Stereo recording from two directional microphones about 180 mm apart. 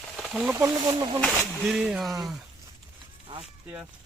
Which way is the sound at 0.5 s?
20° right (ahead or behind).